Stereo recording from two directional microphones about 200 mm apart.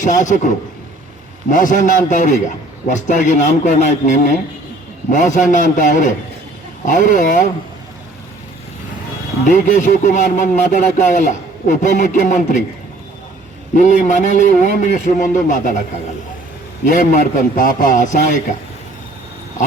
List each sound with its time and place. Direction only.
0.0 s speech: 40° left (ahead or behind)
9.5 s speech: 40° left (ahead or behind)
13.7 s speech: 40° left (ahead or behind)
16.8 s speech: 40° left (ahead or behind)